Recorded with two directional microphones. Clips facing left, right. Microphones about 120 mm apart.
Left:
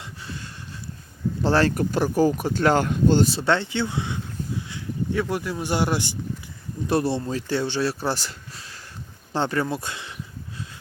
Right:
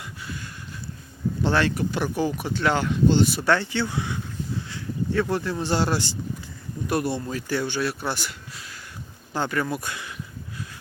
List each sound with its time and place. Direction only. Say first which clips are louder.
0.0 s a sound: even; 30° left (ahead or behind)
1.4 s speech: left 3 dB; 35° left (ahead or behind)
3.2 s speech: even; 25° left (ahead or behind)
5.2 s speech: right 1 dB; 10° left (ahead or behind)
6.8 s speech: left 3 dB; 30° left (ahead or behind)